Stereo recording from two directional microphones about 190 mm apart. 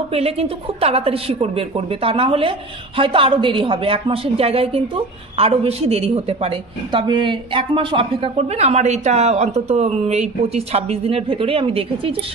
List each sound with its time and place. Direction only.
0.1 s a woman's voice: 30° right (ahead or behind)